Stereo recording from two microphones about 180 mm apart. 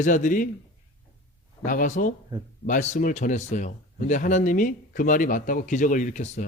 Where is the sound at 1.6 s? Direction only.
45° left (ahead or behind).